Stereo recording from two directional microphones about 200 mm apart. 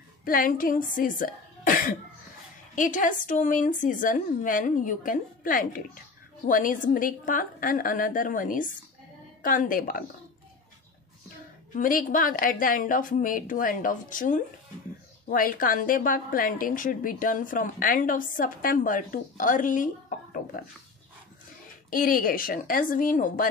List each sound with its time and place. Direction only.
0.2 s a woman's voice: 45° left (ahead or behind)
11.7 s a woman's voice: 45° left (ahead or behind)
21.9 s a woman's voice: 45° left (ahead or behind)